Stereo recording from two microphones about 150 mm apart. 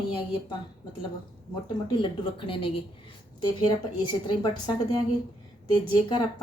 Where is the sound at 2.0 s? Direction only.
35° left (ahead or behind).